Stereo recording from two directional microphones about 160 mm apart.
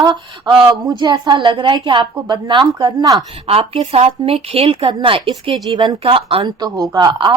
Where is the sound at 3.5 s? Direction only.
40° right (ahead or behind).